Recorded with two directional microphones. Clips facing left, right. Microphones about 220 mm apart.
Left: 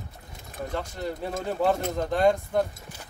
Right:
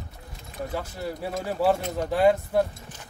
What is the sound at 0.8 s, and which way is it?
Speech, 5° right (ahead or behind).